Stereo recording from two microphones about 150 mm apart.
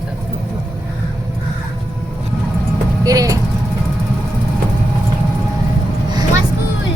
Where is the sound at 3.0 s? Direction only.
25° right (ahead or behind).